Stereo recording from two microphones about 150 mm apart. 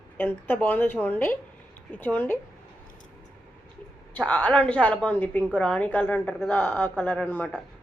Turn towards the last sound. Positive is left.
turn(degrees=10)  # may be behind; listen again after turning